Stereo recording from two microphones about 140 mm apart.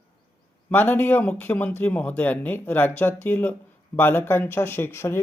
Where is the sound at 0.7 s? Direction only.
15° left (ahead or behind).